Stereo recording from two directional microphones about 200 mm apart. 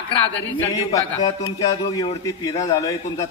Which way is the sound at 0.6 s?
20° left (ahead or behind).